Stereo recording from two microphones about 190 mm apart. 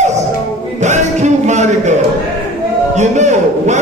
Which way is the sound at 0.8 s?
40° right (ahead or behind).